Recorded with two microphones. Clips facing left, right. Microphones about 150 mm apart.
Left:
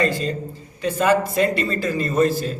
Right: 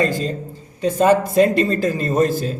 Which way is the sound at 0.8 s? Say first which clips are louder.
Right 3 dB; 40° right (ahead or behind).